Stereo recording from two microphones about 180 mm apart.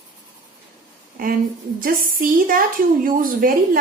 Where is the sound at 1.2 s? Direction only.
50° right (ahead or behind).